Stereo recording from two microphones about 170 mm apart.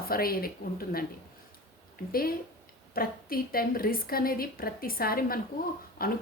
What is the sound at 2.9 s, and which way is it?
A woman's voice, 60° left (ahead or behind).